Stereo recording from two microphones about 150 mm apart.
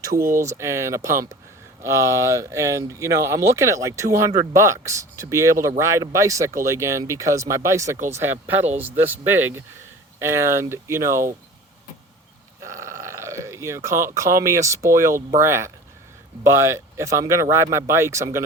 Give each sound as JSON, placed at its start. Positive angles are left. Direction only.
{"t": 0.3, "sound": "speech", "side_deg": -20}
{"t": 12.8, "sound": "grunt", "side_deg": -20}
{"t": 14.2, "sound": "speech", "side_deg": -20}